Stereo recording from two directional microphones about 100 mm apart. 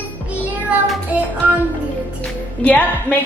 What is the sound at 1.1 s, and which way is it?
Music, 15° right (ahead or behind).